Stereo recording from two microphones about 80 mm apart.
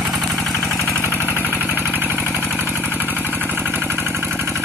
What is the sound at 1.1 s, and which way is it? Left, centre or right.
Vehicle, left.